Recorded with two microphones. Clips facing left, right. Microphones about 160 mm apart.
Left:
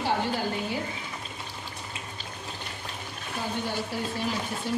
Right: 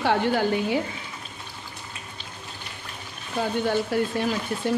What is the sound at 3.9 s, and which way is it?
Speech, 60° right (ahead or behind).